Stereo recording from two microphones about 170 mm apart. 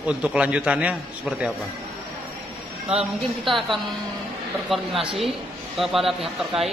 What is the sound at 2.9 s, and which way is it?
Speech, centre (ahead or behind).